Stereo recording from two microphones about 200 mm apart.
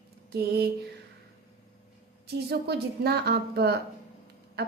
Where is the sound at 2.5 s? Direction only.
55° right (ahead or behind).